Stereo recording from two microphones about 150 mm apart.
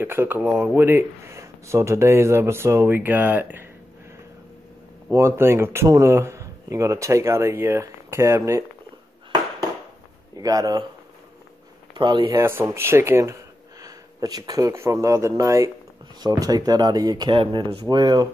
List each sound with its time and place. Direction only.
0.0 s speech: 15° right (ahead or behind)
5.1 s speech: 15° right (ahead or behind)
10.3 s speech: 25° right (ahead or behind)
12.0 s speech: 30° right (ahead or behind)
12.4 s speech: 15° right (ahead or behind)